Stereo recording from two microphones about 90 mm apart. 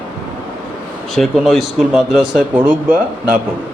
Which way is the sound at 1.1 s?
Centre (ahead or behind).